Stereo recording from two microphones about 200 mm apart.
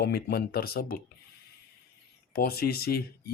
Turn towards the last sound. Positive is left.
turn(degrees=50)  # may be behind; listen again after turning